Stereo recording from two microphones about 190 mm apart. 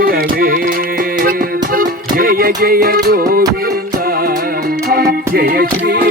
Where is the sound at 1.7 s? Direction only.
50° right (ahead or behind).